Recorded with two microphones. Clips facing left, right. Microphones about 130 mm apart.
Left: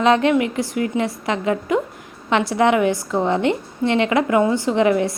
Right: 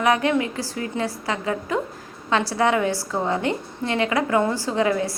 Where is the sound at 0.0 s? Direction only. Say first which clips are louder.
Left 4 dB; 20° left (ahead or behind).